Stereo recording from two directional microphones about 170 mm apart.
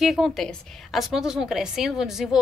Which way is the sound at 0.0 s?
Centre (ahead or behind).